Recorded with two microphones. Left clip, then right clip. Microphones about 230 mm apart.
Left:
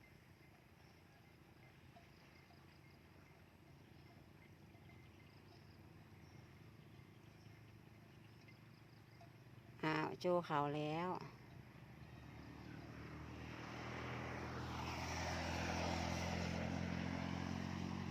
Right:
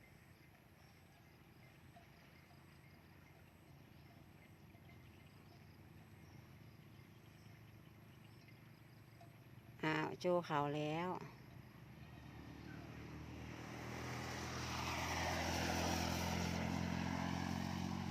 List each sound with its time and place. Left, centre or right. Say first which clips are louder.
9.8 s speech: right 1 dB; centre
13.3 s vehicle: left 1 dB; centre; by 18.1 s right